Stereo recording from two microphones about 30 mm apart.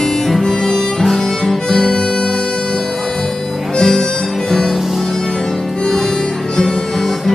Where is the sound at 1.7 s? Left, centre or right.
Left.